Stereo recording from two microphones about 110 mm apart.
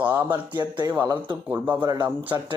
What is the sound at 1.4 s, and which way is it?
Speech, 15° right (ahead or behind).